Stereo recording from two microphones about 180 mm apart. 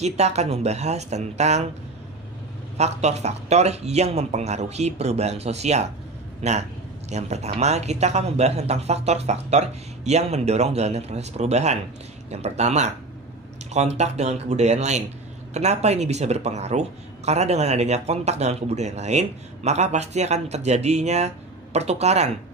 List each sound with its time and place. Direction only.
0.0 s speech: 40° right (ahead or behind)
2.8 s speech: 35° right (ahead or behind)